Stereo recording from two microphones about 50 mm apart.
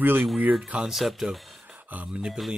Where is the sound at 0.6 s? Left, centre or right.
Right.